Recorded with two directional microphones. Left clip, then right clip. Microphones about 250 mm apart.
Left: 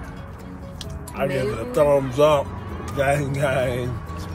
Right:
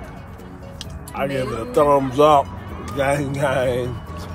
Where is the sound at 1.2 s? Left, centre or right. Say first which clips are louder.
Even; centre.